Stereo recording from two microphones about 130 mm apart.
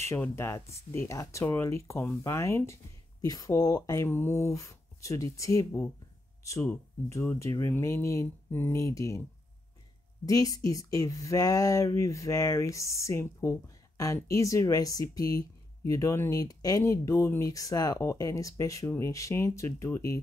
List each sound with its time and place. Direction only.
0.2 s speech: 20° left (ahead or behind)
7.1 s speech: 20° left (ahead or behind)
10.2 s speech: 25° left (ahead or behind)